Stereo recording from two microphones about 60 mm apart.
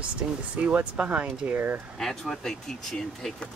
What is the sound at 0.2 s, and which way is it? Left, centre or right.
Speech, right.